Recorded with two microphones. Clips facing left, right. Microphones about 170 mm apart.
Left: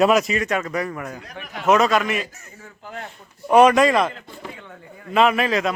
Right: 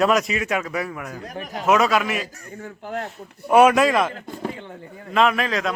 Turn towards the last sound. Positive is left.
turn(degrees=5)  # may be behind; listen again after turning